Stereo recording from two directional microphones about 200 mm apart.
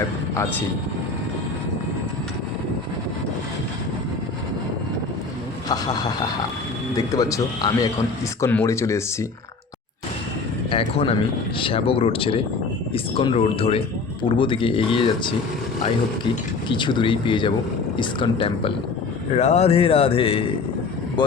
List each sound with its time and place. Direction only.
5.6 s speech: 20° left (ahead or behind)
10.7 s speech: 30° left (ahead or behind)
16.6 s speech: 25° left (ahead or behind)